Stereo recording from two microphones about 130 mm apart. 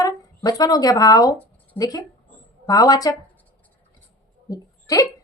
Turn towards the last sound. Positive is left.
turn(degrees=25)  # may be behind; listen again after turning